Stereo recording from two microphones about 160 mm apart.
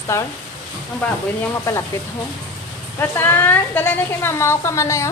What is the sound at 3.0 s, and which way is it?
A woman's voice, 15° left (ahead or behind).